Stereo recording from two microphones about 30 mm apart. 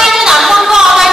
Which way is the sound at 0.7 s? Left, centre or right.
Centre.